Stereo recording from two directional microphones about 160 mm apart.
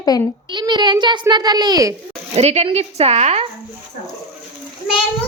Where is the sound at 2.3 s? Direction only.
40° right (ahead or behind).